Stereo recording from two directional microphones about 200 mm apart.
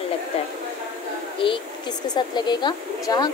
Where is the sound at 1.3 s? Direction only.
25° left (ahead or behind).